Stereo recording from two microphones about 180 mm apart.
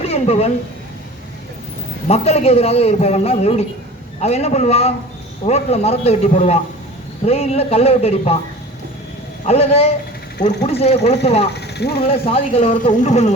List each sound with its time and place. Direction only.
0.0 s a sound: 35° left (ahead or behind)
2.0 s a man's voice: 35° left (ahead or behind)
9.5 s a man's voice: 35° left (ahead or behind)
11.5 s speech: 65° left (ahead or behind)
12.0 s a man's voice: 30° left (ahead or behind)